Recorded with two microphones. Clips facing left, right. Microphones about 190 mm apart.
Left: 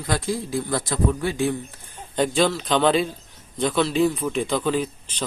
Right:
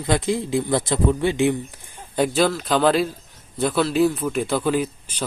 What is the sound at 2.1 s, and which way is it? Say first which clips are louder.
Speech: right 1 dB; 5° right (ahead or behind).